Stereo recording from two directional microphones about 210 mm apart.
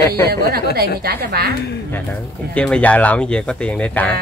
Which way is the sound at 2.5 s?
5° left (ahead or behind).